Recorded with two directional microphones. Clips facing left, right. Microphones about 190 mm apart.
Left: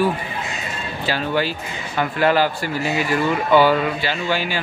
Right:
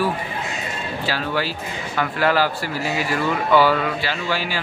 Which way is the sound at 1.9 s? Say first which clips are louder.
Left 2 dB; 20° left (ahead or behind).